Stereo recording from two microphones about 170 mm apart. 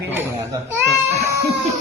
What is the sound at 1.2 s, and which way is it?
Crying, 15° right (ahead or behind).